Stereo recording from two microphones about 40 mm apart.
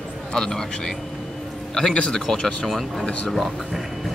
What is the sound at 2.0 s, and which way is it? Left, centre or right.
Speech, left.